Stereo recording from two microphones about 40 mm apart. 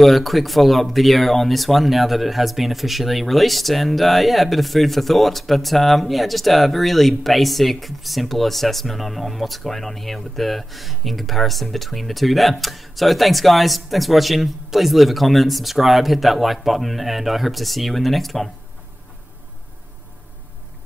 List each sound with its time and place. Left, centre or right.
0.0 s speech: centre